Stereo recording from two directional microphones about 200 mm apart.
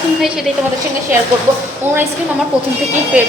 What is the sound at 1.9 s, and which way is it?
Speech, 10° right (ahead or behind).